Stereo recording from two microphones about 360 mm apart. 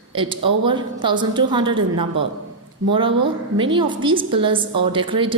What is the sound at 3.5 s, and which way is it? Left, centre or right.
A woman's voice, centre.